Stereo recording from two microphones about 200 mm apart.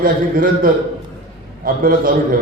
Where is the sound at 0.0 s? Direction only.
45° right (ahead or behind).